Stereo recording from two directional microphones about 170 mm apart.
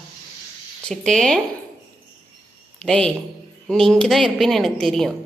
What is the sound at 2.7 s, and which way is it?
A woman's voice, 5° left (ahead or behind).